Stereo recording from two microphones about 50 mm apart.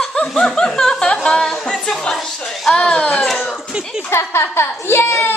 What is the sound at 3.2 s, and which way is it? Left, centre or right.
Speech, centre.